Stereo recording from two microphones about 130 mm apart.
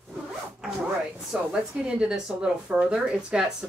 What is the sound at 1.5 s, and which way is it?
Speech, 5° right (ahead or behind).